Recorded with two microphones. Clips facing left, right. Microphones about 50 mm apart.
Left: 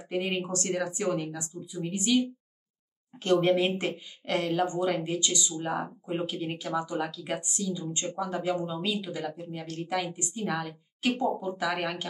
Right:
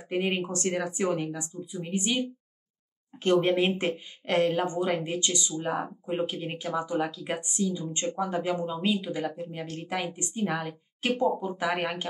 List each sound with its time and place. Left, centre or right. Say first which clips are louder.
0.1 s speech: right 2 dB; right